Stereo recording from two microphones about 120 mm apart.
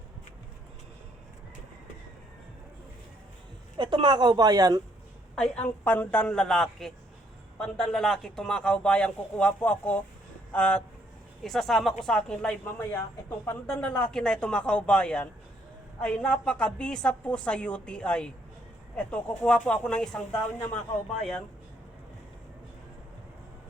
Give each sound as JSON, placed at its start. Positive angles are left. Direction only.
{"t": 3.8, "sound": "a woman's voice", "side_deg": -40}
{"t": 5.6, "sound": "a man's voice", "side_deg": 15}